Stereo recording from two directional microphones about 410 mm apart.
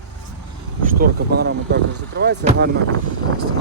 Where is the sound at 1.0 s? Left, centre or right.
Right.